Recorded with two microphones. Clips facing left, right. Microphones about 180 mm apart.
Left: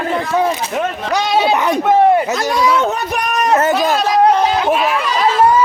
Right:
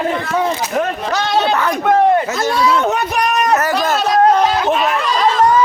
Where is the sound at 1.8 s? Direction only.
5° left (ahead or behind).